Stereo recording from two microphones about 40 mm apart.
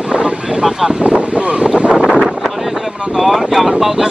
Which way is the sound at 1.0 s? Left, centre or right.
Right.